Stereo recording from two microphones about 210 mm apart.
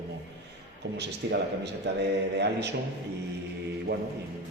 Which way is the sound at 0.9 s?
55° right (ahead or behind).